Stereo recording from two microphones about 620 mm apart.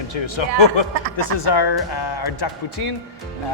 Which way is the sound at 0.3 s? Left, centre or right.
Left.